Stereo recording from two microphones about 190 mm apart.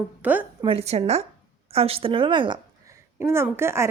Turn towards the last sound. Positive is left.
turn(degrees=-15)  # may be behind; listen again after turning